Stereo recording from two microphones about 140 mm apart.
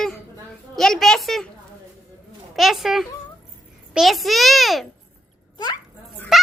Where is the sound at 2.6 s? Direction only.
Centre (ahead or behind).